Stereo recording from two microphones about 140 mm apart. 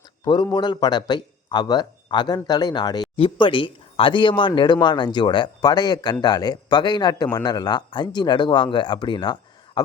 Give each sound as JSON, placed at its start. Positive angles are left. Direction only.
{"t": 0.4, "sound": "a man's voice", "side_deg": 30}